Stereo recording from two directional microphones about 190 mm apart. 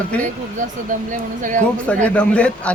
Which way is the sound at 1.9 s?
5° left (ahead or behind).